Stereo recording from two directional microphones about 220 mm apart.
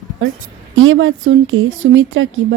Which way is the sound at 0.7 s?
65° right (ahead or behind).